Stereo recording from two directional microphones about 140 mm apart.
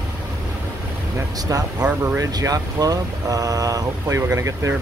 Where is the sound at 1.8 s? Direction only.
10° right (ahead or behind).